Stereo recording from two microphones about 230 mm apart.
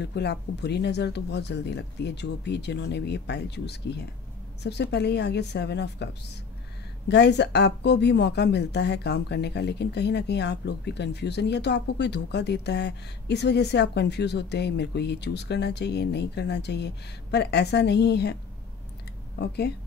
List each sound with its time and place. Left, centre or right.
0.0 s a woman's voice: left
19.3 s a woman's voice: left